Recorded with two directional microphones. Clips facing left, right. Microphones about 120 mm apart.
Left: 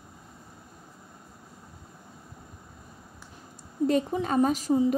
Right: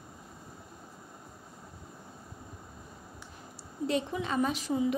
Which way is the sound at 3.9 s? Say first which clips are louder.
Left 5 dB; 45° left (ahead or behind).